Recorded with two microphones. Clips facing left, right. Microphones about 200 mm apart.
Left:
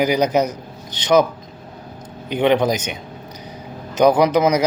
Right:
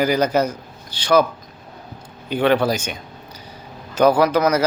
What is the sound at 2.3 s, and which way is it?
Speech, 20° left (ahead or behind).